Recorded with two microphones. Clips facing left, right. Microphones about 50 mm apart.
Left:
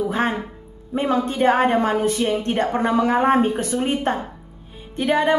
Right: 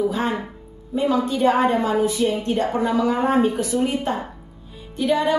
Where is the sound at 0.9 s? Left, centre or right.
Left.